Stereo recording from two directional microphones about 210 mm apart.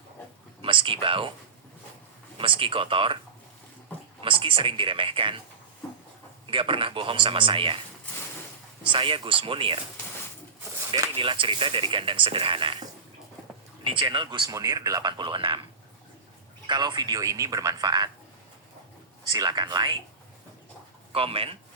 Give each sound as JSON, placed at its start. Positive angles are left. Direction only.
{"t": 0.6, "sound": "speech", "side_deg": -25}
{"t": 2.4, "sound": "speech", "side_deg": -25}
{"t": 4.2, "sound": "speech", "side_deg": -25}
{"t": 6.5, "sound": "speech", "side_deg": -25}
{"t": 8.8, "sound": "speech", "side_deg": -25}
{"t": 10.9, "sound": "speech", "side_deg": -20}
{"t": 13.8, "sound": "speech", "side_deg": -25}
{"t": 16.6, "sound": "speech", "side_deg": -20}
{"t": 19.3, "sound": "speech", "side_deg": -20}
{"t": 21.1, "sound": "speech", "side_deg": -25}